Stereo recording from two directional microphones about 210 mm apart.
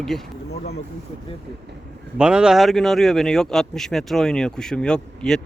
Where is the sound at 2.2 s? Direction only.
5° right (ahead or behind).